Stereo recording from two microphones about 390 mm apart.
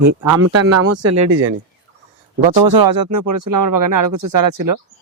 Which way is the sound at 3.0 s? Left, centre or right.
Right.